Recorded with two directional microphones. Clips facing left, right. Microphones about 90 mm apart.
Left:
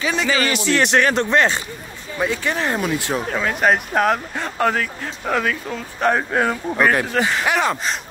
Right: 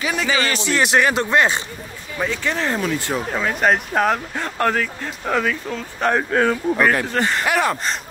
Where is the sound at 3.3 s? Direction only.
Centre (ahead or behind).